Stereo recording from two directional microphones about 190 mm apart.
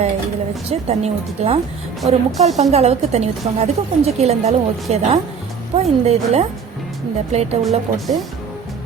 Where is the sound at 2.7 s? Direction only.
35° right (ahead or behind).